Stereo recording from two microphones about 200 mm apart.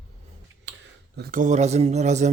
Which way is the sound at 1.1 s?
50° right (ahead or behind).